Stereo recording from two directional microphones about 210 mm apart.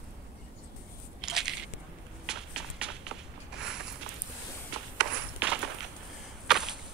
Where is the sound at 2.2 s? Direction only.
5° right (ahead or behind).